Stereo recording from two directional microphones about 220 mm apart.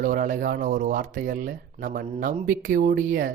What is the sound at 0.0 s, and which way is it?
Speech, 40° right (ahead or behind).